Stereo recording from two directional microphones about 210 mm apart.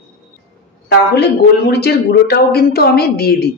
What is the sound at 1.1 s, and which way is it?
Speech, 50° left (ahead or behind).